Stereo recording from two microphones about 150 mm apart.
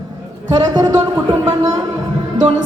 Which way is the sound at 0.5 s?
25° right (ahead or behind).